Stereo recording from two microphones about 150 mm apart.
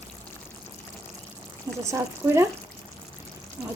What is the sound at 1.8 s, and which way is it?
Speech, 20° right (ahead or behind).